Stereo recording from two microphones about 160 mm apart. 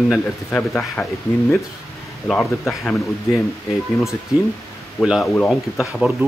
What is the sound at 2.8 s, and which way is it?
Speech, 5° left (ahead or behind).